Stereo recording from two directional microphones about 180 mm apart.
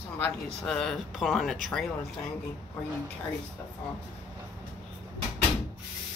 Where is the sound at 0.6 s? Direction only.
Centre (ahead or behind).